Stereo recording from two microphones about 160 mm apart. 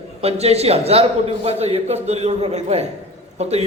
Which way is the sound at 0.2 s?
40° right (ahead or behind).